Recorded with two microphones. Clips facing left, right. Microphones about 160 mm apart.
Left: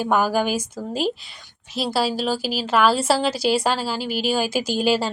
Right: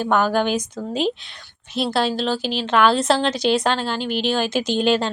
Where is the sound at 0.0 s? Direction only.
5° left (ahead or behind).